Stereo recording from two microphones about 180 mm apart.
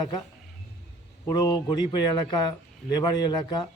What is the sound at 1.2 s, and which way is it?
Speech, 20° left (ahead or behind).